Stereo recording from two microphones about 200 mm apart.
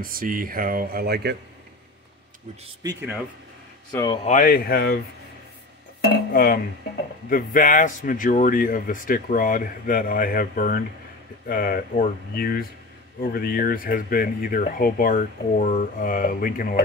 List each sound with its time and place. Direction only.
0.0 s speech: 45° right (ahead or behind)
2.8 s speech: 20° right (ahead or behind)
3.9 s speech: 20° left (ahead or behind)
4.3 s speech: 45° left (ahead or behind)
5.9 s speech: 50° left (ahead or behind)